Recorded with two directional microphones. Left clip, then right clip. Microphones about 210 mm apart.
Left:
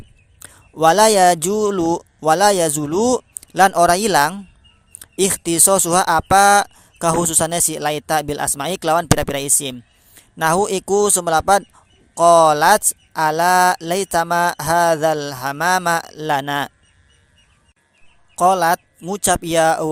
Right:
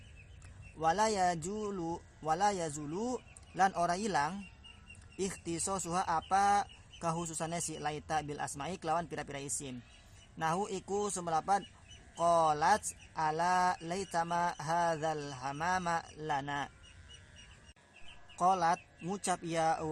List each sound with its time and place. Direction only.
0.4 s speech: 45° left (ahead or behind)
18.3 s speech: 40° left (ahead or behind)